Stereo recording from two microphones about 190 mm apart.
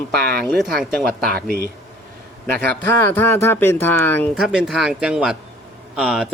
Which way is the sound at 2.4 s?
10° left (ahead or behind).